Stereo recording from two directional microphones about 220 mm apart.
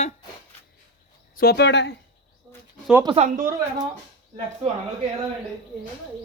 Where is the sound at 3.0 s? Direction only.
30° right (ahead or behind).